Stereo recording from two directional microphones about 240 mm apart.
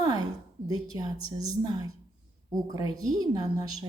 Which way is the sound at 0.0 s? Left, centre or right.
Centre.